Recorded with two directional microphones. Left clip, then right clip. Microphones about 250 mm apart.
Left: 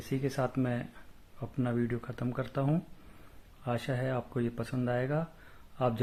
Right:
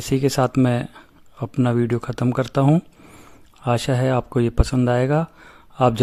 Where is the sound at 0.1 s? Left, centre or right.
Right.